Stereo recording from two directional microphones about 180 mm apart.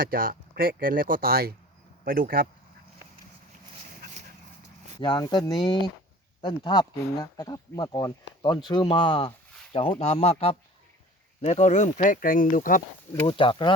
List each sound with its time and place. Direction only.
0.0 s speech: 50° right (ahead or behind)
4.9 s speech: 25° left (ahead or behind); by 12.8 s 50° left (ahead or behind)
13.2 s speech: 30° left (ahead or behind)